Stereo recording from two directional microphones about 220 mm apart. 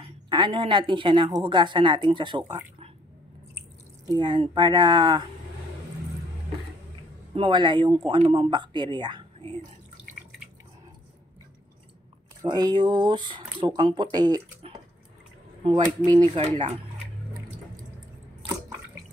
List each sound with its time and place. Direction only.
0.3 s speech: 20° right (ahead or behind)
4.1 s speech: 20° right (ahead or behind)
7.3 s speech: 20° right (ahead or behind)
12.4 s speech: 15° right (ahead or behind)